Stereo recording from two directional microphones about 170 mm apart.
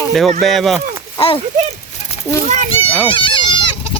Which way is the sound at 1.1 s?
30° left (ahead or behind).